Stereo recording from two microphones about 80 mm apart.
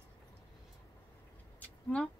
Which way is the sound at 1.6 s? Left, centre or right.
Centre.